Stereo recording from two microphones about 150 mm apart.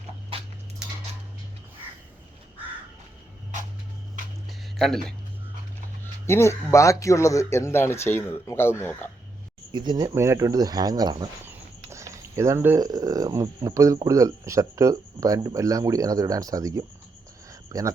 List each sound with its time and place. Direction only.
4.4 s a sound: centre (ahead or behind)
6.2 s speech: 15° left (ahead or behind)
9.7 s speech: 30° right (ahead or behind)